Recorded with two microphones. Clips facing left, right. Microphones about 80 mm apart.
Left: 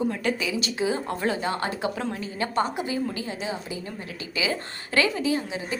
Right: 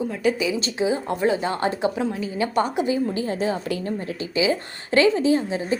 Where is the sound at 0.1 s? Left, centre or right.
Centre.